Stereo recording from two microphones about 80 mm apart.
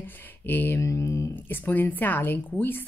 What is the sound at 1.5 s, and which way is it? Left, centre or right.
Speech, left.